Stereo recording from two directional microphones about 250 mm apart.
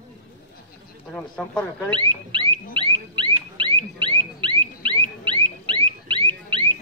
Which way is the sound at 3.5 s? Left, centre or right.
Right.